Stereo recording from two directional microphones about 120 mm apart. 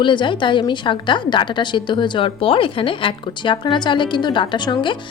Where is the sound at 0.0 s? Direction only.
40° left (ahead or behind).